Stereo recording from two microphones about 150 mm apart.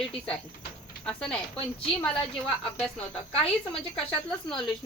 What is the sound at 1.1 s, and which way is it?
Speech, 5° left (ahead or behind).